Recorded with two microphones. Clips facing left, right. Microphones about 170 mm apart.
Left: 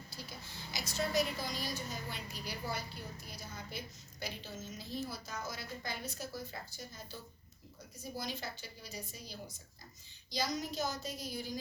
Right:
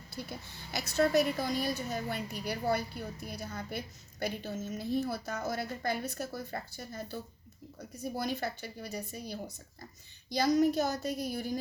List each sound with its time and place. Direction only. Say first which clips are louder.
0.2 s a woman's voice: right 8 dB; 60° right (ahead or behind)